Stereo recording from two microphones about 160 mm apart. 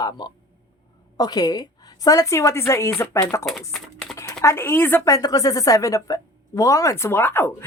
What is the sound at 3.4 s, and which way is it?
Speech, centre (ahead or behind).